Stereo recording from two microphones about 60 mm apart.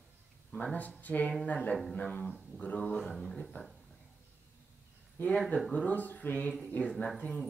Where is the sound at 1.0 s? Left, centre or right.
Left.